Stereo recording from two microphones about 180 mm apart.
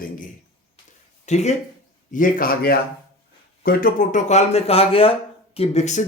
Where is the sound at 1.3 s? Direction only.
40° left (ahead or behind).